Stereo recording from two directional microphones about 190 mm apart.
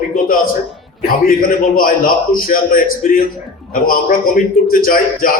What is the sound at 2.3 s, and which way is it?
A man's voice, 50° left (ahead or behind).